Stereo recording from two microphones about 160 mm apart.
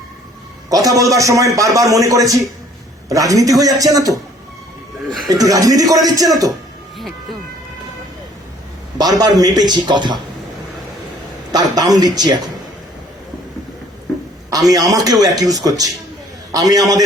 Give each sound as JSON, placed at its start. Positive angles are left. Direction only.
{"t": 0.7, "sound": "a man's voice", "side_deg": -20}
{"t": 5.3, "sound": "a man's voice", "side_deg": -20}
{"t": 9.0, "sound": "a man's voice", "side_deg": -25}
{"t": 11.5, "sound": "a man's voice", "side_deg": -25}
{"t": 14.7, "sound": "a man's voice", "side_deg": -25}